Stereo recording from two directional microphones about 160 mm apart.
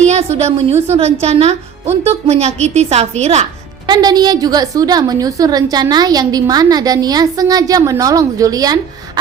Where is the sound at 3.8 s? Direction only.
25° right (ahead or behind).